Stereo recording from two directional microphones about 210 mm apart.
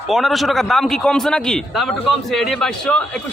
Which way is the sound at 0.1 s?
Centre (ahead or behind).